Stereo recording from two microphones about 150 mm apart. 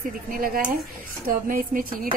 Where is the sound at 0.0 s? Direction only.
70° right (ahead or behind).